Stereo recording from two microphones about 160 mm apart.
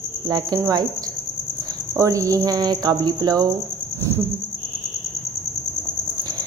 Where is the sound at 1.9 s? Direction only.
20° right (ahead or behind).